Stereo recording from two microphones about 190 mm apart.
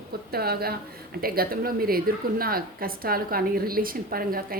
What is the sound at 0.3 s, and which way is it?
A woman's voice, 55° right (ahead or behind).